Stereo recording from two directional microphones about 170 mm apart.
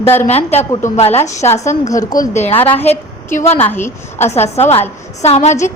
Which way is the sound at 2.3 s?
40° left (ahead or behind).